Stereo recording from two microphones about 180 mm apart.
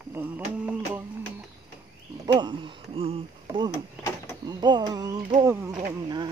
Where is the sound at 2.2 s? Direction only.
25° right (ahead or behind).